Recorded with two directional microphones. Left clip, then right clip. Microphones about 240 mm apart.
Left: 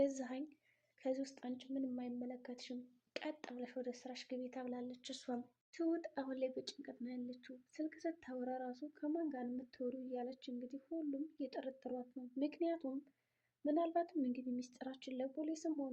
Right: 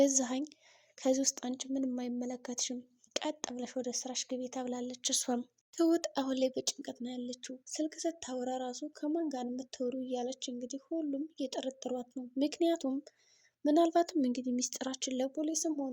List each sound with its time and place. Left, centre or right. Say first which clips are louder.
0.0 s speech: right 9 dB; right